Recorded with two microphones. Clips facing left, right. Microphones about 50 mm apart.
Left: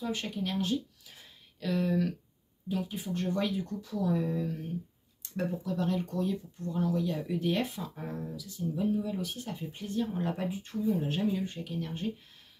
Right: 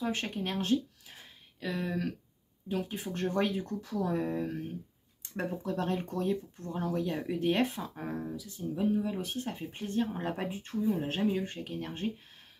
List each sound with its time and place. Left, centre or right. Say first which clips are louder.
0.0 s speech: right 1 dB; right
2.7 s speech: left 1 dB; right
5.2 s a sound: left 2 dB; right
5.6 s speech: right 1 dB; right
11.0 s speech: even; right